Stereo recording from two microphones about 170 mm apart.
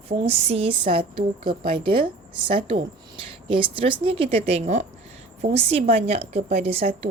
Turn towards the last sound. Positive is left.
turn(degrees=-35)  # may be behind; listen again after turning